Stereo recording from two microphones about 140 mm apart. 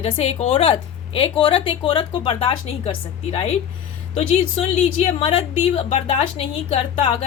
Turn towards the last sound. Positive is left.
turn(degrees=45)  # may be behind; listen again after turning